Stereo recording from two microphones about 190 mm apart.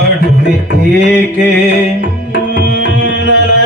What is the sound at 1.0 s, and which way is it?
Mantra, 65° left (ahead or behind).